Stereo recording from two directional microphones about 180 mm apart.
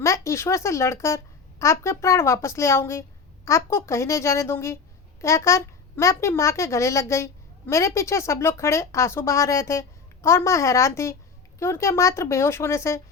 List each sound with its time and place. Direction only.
0.0 s speech: 15° left (ahead or behind)